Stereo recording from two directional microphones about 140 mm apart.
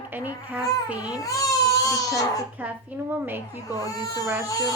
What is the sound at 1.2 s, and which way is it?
Speech, 25° left (ahead or behind).